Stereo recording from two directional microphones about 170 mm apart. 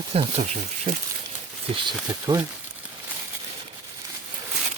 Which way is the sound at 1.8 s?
20° right (ahead or behind).